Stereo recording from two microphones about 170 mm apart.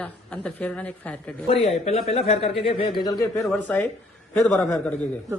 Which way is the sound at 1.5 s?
35° left (ahead or behind).